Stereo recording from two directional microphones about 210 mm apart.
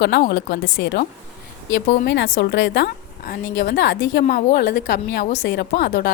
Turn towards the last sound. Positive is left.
turn(degrees=50)  # may be behind; listen again after turning